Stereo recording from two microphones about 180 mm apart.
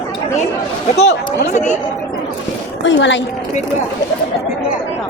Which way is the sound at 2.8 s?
90° left.